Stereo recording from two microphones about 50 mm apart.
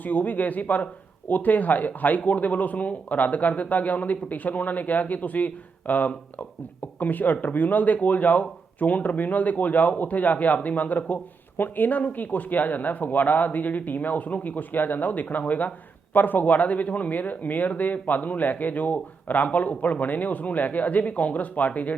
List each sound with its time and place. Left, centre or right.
0.0 s a man's voice: left